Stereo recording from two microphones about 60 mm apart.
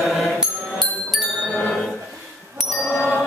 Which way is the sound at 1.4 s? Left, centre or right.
Centre.